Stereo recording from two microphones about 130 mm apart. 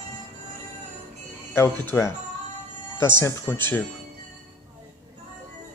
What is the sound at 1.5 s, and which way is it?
Speech, 20° left (ahead or behind).